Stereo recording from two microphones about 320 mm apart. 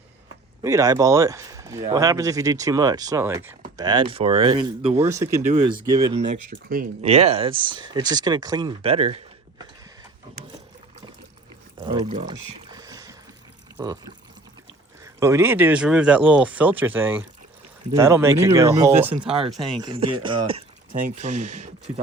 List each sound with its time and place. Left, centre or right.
0.6 s speech: centre
11.8 s a sound: centre
13.7 s speech: centre